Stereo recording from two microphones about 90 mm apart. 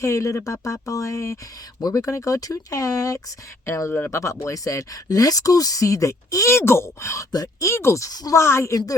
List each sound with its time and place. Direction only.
0.0 s speech: 35° left (ahead or behind)
3.7 s speech: 30° left (ahead or behind)
7.3 s speech: 50° left (ahead or behind)
7.6 s speech: 30° left (ahead or behind)